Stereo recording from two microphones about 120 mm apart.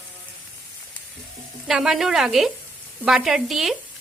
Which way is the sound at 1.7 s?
5° right (ahead or behind).